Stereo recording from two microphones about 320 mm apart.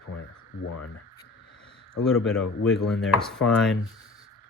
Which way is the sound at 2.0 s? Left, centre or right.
Centre.